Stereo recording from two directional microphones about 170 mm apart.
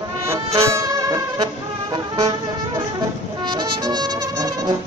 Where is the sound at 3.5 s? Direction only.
25° right (ahead or behind).